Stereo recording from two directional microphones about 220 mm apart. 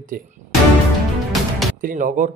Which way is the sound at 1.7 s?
35° right (ahead or behind).